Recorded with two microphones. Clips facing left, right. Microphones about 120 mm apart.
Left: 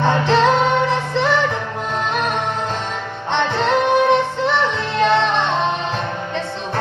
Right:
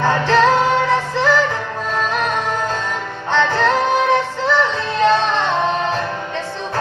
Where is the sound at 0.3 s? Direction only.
25° left (ahead or behind).